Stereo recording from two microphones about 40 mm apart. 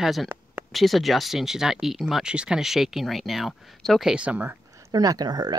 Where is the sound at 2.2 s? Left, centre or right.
Right.